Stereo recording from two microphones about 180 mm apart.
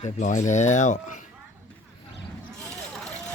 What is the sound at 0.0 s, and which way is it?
Speech, 45° left (ahead or behind).